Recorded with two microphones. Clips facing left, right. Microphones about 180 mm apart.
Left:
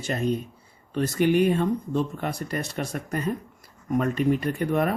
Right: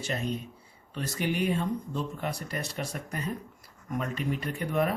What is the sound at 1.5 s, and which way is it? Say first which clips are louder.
Speech: left 6 dB; 55° left (ahead or behind).